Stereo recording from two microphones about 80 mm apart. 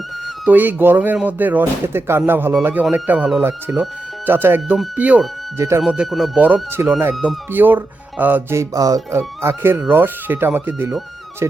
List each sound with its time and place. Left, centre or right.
0.4 s speech: right
5.5 s speech: right
6.1 s speech: centre
6.3 s speech: right
8.5 s music: right
9.1 s speech: right